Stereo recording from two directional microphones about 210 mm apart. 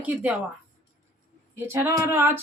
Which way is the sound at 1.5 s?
10° right (ahead or behind).